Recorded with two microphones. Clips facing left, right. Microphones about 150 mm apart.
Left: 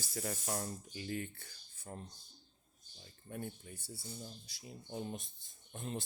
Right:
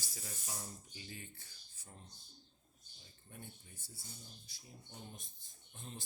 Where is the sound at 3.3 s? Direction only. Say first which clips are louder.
Left 10 dB; 65° left (ahead or behind).